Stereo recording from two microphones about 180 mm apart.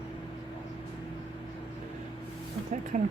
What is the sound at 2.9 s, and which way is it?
Speech, 40° right (ahead or behind).